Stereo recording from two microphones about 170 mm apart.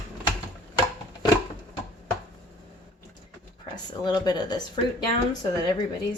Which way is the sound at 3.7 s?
25° left (ahead or behind).